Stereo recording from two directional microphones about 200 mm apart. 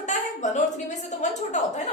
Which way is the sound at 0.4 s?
35° left (ahead or behind).